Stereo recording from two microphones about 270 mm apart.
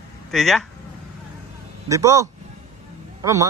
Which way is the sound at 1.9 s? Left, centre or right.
Centre.